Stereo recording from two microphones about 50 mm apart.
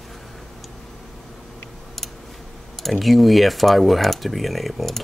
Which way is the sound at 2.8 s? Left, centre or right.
Centre.